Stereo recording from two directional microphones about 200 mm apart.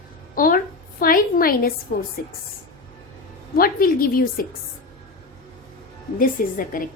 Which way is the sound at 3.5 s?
45° left (ahead or behind).